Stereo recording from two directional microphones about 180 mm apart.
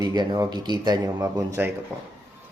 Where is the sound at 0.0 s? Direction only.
20° right (ahead or behind).